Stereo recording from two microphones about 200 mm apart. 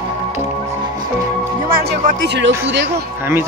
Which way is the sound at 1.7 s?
50° right (ahead or behind).